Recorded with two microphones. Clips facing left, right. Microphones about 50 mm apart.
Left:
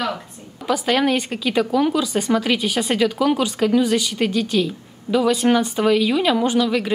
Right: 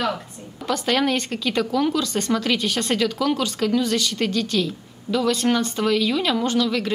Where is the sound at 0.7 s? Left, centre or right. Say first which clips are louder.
Left 3 dB; centre.